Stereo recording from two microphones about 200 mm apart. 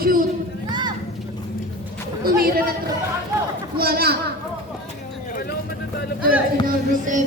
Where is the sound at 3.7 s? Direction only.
50° right (ahead or behind).